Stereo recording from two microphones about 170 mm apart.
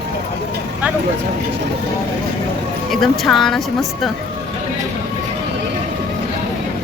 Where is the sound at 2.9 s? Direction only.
Centre (ahead or behind).